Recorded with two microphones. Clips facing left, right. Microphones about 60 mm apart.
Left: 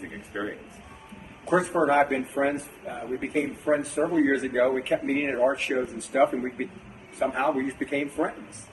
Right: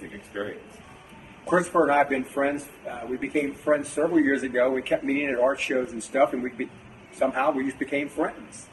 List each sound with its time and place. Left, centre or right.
0.3 s a man's voice: centre
1.6 s speech: centre